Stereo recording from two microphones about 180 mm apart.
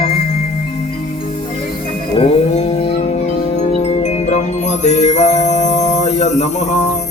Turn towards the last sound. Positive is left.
turn(degrees=40)  # may be behind; listen again after turning